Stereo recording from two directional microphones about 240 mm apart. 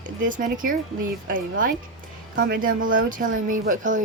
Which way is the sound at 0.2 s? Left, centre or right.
Right.